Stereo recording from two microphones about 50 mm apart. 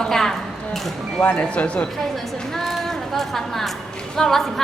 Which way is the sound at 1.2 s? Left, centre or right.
Left.